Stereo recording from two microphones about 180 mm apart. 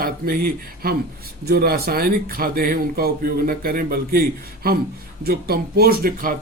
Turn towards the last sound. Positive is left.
turn(degrees=-55)  # may be behind; listen again after turning